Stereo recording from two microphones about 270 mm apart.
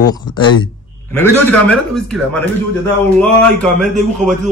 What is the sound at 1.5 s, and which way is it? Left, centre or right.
A man's voice, centre.